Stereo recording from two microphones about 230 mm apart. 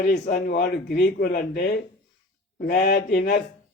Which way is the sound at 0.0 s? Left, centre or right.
Left.